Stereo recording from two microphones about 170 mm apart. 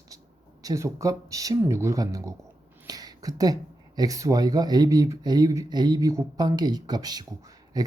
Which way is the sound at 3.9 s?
20° right (ahead or behind).